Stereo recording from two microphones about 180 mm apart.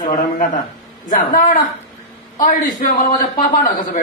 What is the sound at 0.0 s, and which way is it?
A man's voice, 45° left (ahead or behind).